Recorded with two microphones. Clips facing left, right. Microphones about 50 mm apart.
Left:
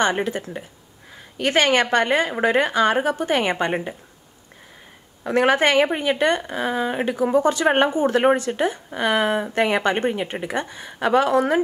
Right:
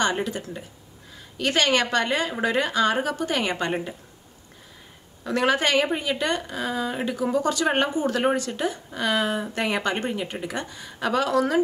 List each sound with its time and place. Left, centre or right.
0.0 s a woman's voice: left
5.2 s a woman's voice: left